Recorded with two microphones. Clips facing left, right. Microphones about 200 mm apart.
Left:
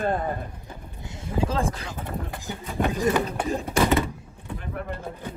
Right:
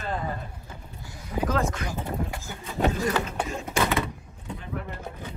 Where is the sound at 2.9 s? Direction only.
15° left (ahead or behind).